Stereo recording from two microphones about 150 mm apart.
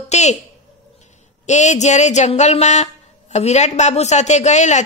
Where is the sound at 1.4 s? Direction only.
50° left (ahead or behind).